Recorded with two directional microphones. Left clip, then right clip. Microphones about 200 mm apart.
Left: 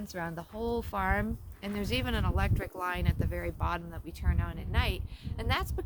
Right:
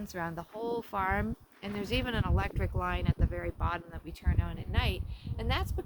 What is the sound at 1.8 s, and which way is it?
Speech, 50° left (ahead or behind).